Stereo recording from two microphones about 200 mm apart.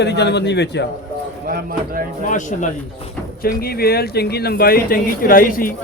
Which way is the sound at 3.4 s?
50° left (ahead or behind).